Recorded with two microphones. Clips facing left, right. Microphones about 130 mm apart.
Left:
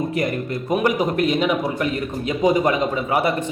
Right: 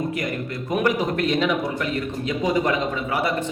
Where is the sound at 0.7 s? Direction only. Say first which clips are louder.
Left 2 dB; 15° left (ahead or behind).